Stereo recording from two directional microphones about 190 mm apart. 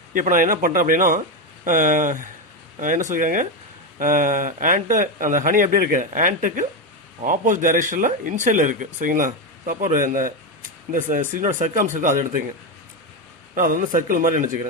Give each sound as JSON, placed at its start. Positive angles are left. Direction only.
{"t": 0.1, "sound": "speech", "side_deg": -45}
{"t": 13.6, "sound": "speech", "side_deg": -45}